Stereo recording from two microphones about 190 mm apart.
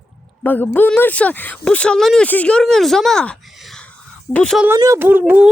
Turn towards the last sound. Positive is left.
turn(degrees=-10)  # may be behind; listen again after turning